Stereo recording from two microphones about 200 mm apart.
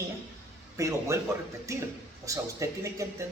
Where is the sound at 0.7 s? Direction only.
15° right (ahead or behind).